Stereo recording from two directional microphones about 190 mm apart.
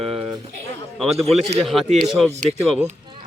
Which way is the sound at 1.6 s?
Centre (ahead or behind).